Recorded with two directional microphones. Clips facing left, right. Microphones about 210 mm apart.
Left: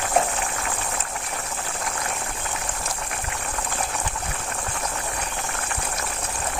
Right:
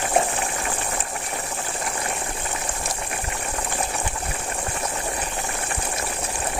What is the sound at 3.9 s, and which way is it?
Boiling, 10° right (ahead or behind).